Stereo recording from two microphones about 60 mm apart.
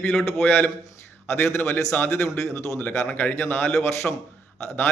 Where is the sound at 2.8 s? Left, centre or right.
Left.